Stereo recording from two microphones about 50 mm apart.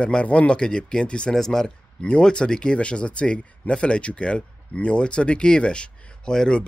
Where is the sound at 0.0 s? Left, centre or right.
Left.